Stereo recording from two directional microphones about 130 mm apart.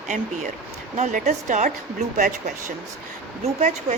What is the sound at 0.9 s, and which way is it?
Speech, 65° right (ahead or behind).